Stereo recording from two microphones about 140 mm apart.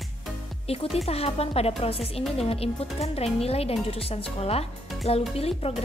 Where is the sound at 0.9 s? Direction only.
45° left (ahead or behind).